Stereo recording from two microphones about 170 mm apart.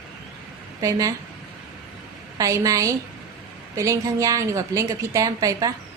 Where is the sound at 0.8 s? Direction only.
20° right (ahead or behind).